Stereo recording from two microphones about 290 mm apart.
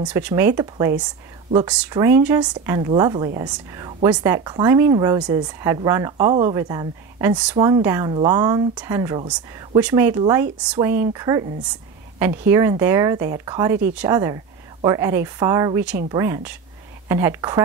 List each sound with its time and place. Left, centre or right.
0.0 s speech: centre